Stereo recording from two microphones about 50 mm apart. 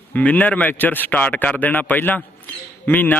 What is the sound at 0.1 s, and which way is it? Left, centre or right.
A man's voice, left.